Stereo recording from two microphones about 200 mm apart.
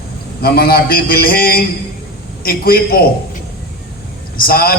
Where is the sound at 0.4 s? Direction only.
50° left (ahead or behind).